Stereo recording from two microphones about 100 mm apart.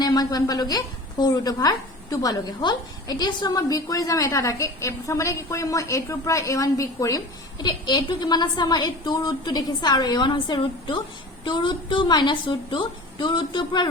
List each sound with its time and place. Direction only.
0.0 s a woman's voice: 40° left (ahead or behind)
7.6 s a woman's voice: 45° left (ahead or behind)